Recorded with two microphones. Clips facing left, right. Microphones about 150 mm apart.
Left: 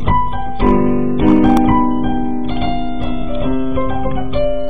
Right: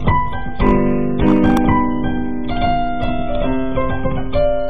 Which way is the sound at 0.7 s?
45° left (ahead or behind).